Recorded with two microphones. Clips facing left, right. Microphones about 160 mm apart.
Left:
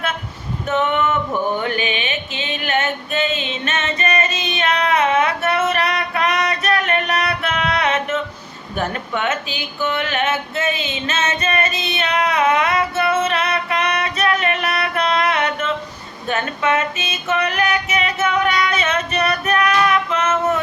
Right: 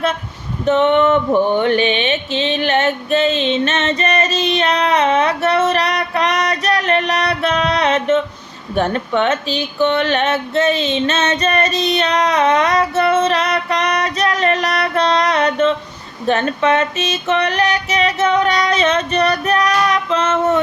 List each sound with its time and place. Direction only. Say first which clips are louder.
0.6 s music: right 6 dB; 30° right (ahead or behind)
1.6 s a sound: right 7 dB; 30° right (ahead or behind)
9.2 s music: right 5 dB; 35° right (ahead or behind)